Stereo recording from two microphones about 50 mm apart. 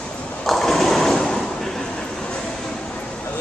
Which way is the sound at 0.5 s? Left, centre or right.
Centre.